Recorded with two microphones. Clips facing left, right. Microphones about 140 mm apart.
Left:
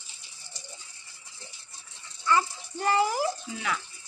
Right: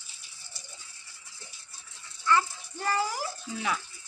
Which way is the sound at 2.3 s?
15° left (ahead or behind).